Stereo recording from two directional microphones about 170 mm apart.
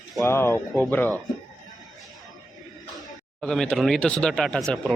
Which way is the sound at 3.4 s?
5° left (ahead or behind).